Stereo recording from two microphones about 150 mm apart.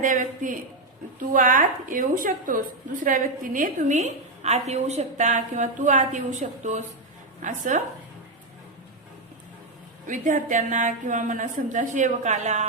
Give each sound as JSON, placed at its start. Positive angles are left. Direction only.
{"t": 0.0, "sound": "a woman's voice", "side_deg": -60}
{"t": 10.1, "sound": "a woman's voice", "side_deg": -60}